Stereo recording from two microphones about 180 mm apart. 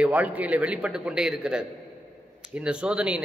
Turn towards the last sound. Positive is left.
turn(degrees=-5)  # may be behind; listen again after turning